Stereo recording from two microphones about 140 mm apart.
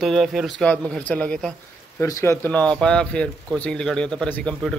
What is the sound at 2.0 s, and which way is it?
Speech, 20° left (ahead or behind).